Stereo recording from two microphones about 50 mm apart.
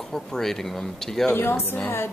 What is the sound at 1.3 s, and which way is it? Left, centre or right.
Speech, left.